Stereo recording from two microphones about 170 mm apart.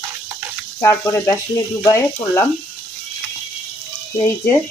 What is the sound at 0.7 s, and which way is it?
Speech, 15° left (ahead or behind).